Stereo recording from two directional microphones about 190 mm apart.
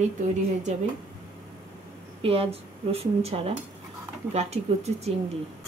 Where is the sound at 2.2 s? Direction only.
30° right (ahead or behind).